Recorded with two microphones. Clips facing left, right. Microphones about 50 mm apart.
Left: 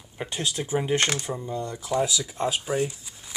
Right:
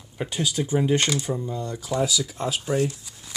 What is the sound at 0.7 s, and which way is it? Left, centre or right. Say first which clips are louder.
Speech: right 3 dB; centre.